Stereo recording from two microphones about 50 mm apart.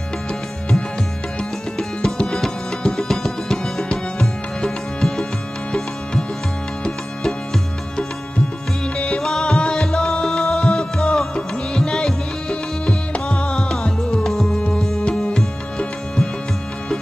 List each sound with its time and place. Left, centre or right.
2.0 s music: centre
8.9 s music: left
11.0 s music: centre
14.2 s music: centre
15.0 s music: centre